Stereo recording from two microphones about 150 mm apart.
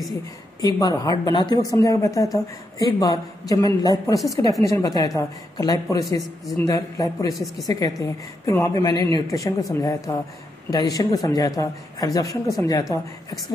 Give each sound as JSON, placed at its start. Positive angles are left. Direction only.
{"t": 0.1, "sound": "a woman's voice", "side_deg": 25}
{"t": 7.3, "sound": "a woman's voice", "side_deg": 0}
{"t": 7.6, "sound": "a woman's voice", "side_deg": 25}